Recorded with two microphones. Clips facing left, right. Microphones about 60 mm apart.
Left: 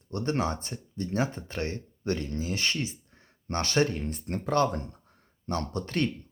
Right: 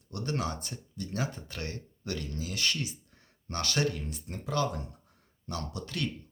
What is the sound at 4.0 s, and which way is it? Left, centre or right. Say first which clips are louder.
Speech: left 7 dB; left.